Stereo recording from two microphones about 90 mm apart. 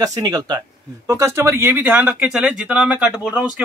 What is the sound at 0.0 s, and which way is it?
Speech, 45° right (ahead or behind).